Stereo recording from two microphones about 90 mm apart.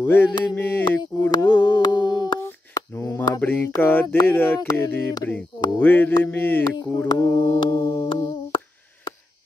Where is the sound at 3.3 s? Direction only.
15° left (ahead or behind).